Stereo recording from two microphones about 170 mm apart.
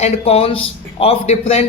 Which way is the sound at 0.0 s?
35° left (ahead or behind).